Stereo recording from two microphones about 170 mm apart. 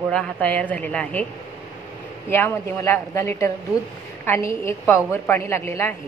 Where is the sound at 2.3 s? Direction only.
15° left (ahead or behind).